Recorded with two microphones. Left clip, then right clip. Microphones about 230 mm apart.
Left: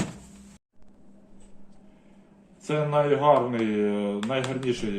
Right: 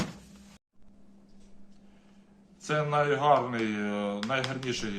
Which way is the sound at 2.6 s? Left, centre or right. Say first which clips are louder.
Left 3 dB; centre.